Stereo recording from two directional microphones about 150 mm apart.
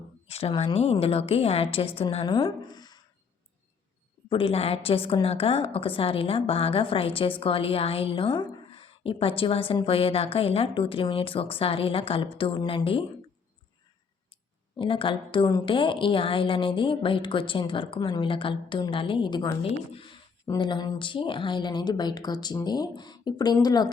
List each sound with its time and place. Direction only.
0.3 s a woman's voice: 40° left (ahead or behind)
4.3 s a woman's voice: 35° left (ahead or behind)
14.8 s a woman's voice: 35° left (ahead or behind)